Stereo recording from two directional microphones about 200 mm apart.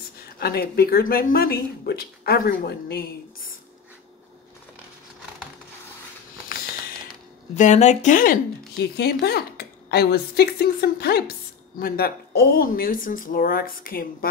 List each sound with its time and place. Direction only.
0.4 s speech: 50° left (ahead or behind)
7.5 s speech: 35° left (ahead or behind)